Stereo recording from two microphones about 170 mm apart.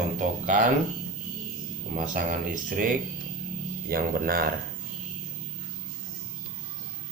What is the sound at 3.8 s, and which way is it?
Speech, 60° right (ahead or behind).